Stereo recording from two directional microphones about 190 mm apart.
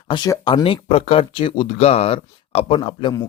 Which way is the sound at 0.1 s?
20° left (ahead or behind).